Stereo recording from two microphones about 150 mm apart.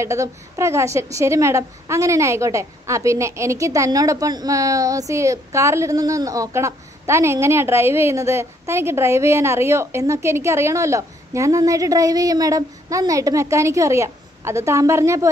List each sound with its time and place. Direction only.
0.0 s a woman's voice: 20° right (ahead or behind)